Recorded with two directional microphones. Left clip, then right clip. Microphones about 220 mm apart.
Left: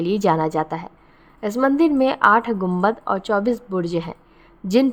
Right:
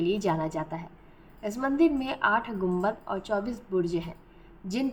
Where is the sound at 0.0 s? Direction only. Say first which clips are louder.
Left 9 dB; 50° left (ahead or behind).